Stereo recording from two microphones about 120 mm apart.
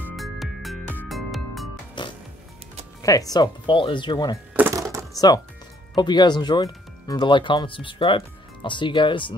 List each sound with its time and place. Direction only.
0.1 s music: centre (ahead or behind)
2.0 s music: 40° left (ahead or behind)
3.0 s speech: 30° left (ahead or behind)
4.6 s music: 25° right (ahead or behind)
5.1 s speech: 30° left (ahead or behind)